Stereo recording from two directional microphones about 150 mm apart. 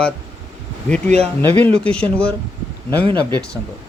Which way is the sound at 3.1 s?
30° right (ahead or behind).